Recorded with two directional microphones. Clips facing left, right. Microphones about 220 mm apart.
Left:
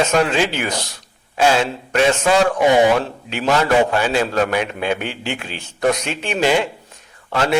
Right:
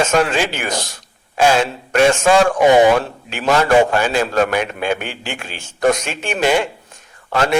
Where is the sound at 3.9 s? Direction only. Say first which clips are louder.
Right 1 dB; 50° right (ahead or behind).